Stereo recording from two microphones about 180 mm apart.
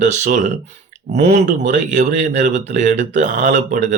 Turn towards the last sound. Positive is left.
turn(degrees=-45)  # may be behind; listen again after turning